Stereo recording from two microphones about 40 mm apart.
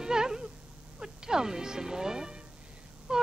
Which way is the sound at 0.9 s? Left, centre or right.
Centre.